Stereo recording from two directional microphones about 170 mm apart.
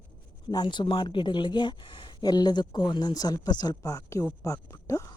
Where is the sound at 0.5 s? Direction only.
25° left (ahead or behind).